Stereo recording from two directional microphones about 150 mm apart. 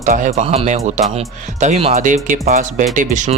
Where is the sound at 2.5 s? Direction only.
60° right (ahead or behind).